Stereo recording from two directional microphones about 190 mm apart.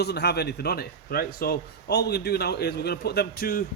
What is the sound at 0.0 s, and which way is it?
A man's voice, 60° left (ahead or behind).